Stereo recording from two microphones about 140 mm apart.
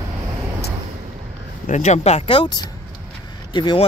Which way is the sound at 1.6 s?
55° left (ahead or behind).